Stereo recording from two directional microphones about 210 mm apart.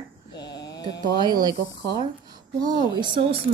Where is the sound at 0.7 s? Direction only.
20° left (ahead or behind).